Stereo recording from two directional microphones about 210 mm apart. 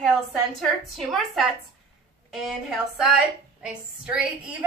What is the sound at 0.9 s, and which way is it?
A woman's voice, centre (ahead or behind).